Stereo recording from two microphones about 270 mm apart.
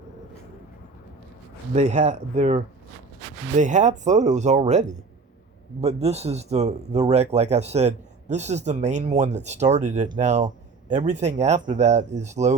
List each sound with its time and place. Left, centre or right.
1.7 s speech: right
3.6 s speech: right